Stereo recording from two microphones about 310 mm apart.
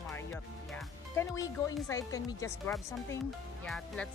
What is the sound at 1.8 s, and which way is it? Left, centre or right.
A woman's voice, centre.